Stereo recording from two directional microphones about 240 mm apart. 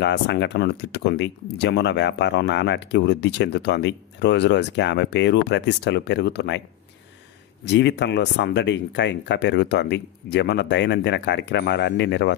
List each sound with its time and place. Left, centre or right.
0.0 s speech: left
7.6 s speech: left